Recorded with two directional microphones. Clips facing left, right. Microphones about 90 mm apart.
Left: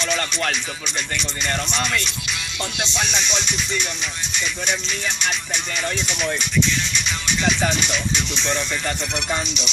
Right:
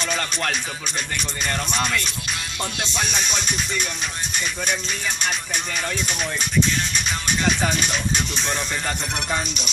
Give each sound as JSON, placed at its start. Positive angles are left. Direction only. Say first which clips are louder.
{"t": 1.4, "sound": "speech", "louder": "even", "side_deg": -45}
{"t": 2.9, "sound": "speech", "louder": "left 1 dB", "side_deg": -45}
{"t": 6.6, "sound": "speech", "louder": "right 3 dB", "side_deg": -45}